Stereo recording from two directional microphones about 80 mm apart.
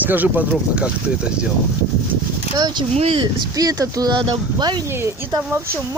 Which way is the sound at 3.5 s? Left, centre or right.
Right.